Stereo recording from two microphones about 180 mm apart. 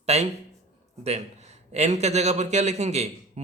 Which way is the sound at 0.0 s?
35° right (ahead or behind).